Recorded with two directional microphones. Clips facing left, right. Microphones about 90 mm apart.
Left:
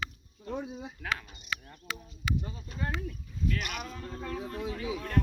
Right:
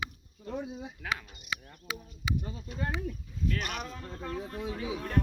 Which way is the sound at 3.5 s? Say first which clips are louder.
Right 1 dB; 35° right (ahead or behind).